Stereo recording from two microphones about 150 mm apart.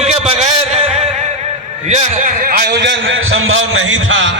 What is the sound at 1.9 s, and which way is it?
Speech, 50° right (ahead or behind).